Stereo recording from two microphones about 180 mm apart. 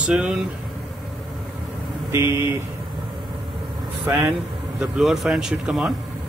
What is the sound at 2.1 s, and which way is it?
Speech, 15° right (ahead or behind).